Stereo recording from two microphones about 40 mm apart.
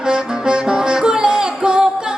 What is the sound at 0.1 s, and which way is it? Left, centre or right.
Music, right.